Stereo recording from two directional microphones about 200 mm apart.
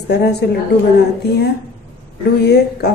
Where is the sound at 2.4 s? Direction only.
55° left (ahead or behind).